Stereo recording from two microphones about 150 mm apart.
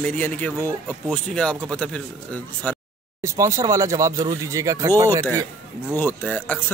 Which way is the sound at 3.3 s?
20° right (ahead or behind).